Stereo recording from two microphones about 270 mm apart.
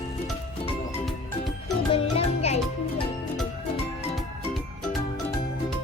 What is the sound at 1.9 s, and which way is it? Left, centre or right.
Music, left.